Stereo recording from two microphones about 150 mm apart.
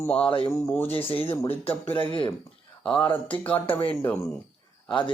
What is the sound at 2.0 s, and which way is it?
Speech, 35° left (ahead or behind).